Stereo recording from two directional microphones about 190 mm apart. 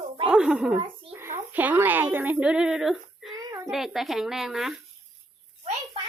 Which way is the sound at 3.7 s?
Centre (ahead or behind).